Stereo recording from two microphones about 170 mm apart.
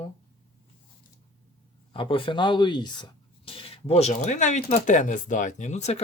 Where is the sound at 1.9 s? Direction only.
30° left (ahead or behind).